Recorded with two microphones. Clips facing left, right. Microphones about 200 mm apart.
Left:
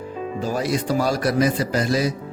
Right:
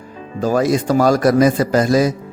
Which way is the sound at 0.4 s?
45° right (ahead or behind).